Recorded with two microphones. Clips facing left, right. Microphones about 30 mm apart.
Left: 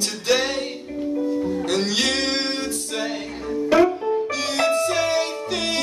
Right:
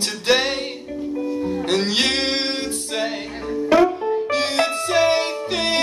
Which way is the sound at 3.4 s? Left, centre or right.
Centre.